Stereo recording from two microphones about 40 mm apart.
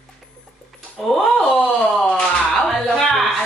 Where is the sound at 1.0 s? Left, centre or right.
Centre.